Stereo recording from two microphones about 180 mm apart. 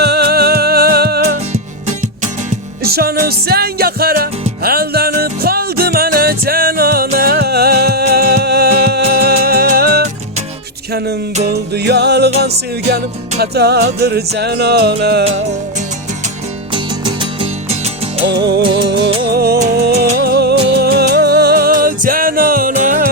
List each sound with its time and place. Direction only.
0.0 s music: 65° right (ahead or behind)
2.8 s music: 60° right (ahead or behind)
13.4 s music: 65° right (ahead or behind)
16.7 s music: 25° right (ahead or behind)
18.3 s music: 65° right (ahead or behind)
18.6 s music: 25° right (ahead or behind)
19.3 s music: 60° right (ahead or behind)